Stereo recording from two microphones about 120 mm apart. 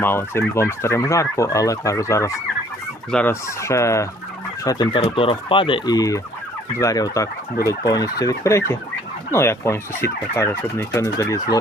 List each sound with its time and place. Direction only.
0.0 s fowl: 20° left (ahead or behind)
3.1 s fowl: 10° left (ahead or behind)
3.6 s fowl: 25° left (ahead or behind)